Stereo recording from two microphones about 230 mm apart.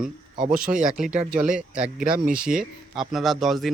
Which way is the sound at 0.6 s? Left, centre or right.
Right.